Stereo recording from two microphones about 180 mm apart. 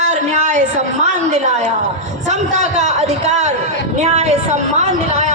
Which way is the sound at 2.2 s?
40° right (ahead or behind).